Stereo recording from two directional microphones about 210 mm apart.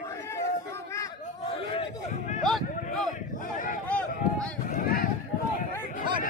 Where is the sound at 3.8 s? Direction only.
5° left (ahead or behind).